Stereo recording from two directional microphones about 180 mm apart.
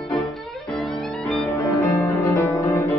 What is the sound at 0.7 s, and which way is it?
Music, centre (ahead or behind).